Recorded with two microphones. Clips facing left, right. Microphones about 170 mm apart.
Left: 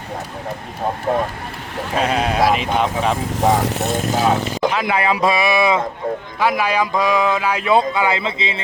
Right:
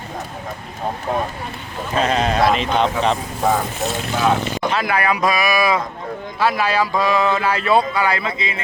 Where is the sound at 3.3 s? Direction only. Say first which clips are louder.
Left 3 dB; 80° left.